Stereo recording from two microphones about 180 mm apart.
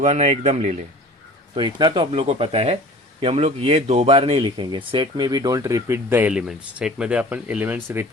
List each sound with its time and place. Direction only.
0.0 s speech: 40° right (ahead or behind)
1.5 s speech: 25° right (ahead or behind); by 8.0 s 10° right (ahead or behind)